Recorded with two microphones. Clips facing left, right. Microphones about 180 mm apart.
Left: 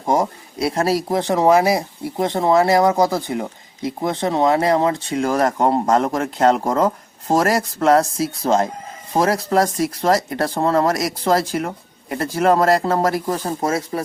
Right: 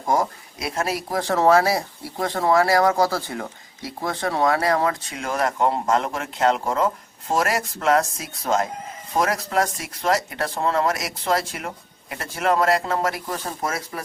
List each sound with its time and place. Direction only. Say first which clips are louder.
0.0 s speech: left 3 dB; 25° left (ahead or behind)